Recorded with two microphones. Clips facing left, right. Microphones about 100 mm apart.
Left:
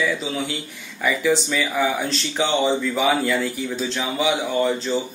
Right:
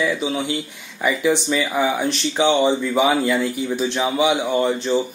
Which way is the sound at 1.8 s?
20° right (ahead or behind).